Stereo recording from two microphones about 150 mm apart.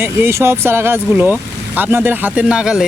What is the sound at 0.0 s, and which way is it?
Speech, 15° right (ahead or behind).